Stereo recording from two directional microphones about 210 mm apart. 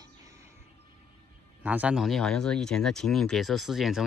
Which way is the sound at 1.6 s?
5° right (ahead or behind).